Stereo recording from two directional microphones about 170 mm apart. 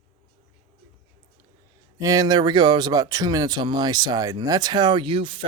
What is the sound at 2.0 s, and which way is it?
Speech, 20° right (ahead or behind).